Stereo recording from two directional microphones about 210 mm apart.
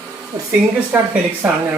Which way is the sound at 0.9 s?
5° right (ahead or behind).